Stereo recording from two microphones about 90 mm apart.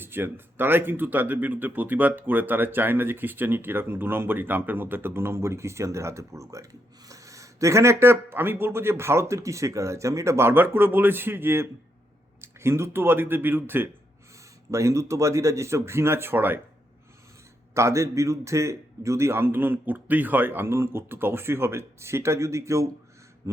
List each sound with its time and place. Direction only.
0.0 s speech: 25° right (ahead or behind)
17.7 s speech: 35° right (ahead or behind)